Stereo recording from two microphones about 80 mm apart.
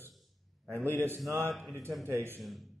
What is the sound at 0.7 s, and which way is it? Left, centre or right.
A man's voice, right.